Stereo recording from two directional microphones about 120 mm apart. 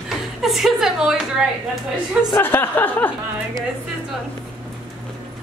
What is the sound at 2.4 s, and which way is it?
Speech, 20° left (ahead or behind).